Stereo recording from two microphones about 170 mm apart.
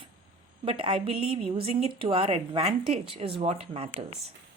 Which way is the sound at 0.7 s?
35° right (ahead or behind).